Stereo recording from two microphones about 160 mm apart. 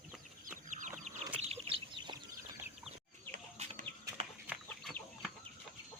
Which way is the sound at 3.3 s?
50° right (ahead or behind).